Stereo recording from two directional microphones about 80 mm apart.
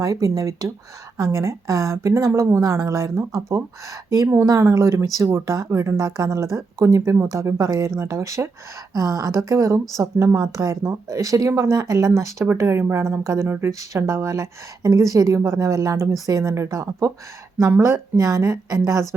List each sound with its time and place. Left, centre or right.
0.0 s speech: right
17.8 s speech: right
18.2 s speech: right